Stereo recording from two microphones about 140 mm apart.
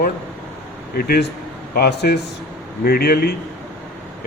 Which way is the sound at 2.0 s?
90° left.